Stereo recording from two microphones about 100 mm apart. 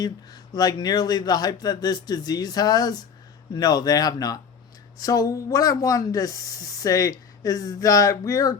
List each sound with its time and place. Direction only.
0.0 s speech: 40° left (ahead or behind)